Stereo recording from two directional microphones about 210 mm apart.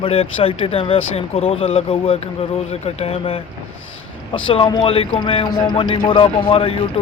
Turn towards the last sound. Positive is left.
turn(degrees=25)  # may be behind; listen again after turning